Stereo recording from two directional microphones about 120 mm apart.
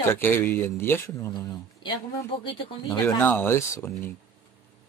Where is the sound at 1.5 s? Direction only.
40° left (ahead or behind).